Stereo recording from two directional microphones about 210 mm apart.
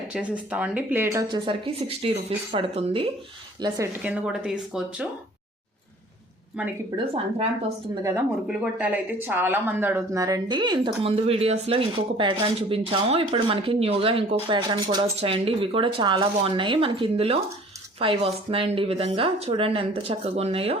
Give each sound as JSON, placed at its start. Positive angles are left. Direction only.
{"t": 0.1, "sound": "speech", "side_deg": -5}
{"t": 4.0, "sound": "speech", "side_deg": -5}
{"t": 6.6, "sound": "speech", "side_deg": -5}
{"t": 6.9, "sound": "speech", "side_deg": -25}
{"t": 8.4, "sound": "speech", "side_deg": -5}